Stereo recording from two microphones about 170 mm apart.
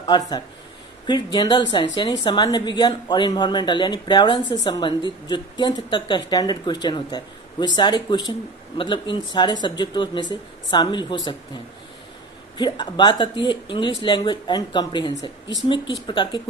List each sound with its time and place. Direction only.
0.1 s speech: 25° left (ahead or behind)